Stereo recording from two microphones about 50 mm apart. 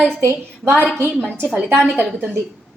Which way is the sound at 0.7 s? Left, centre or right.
Left.